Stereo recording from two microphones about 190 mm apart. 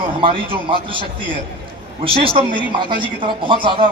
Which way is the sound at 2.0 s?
30° right (ahead or behind).